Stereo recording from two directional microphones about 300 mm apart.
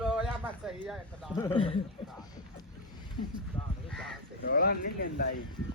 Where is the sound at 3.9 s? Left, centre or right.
Centre.